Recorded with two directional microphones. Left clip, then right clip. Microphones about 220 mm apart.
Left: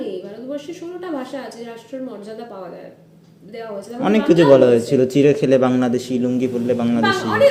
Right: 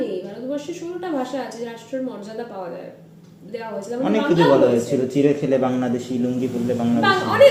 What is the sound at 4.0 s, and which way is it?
A man's voice, 50° left (ahead or behind).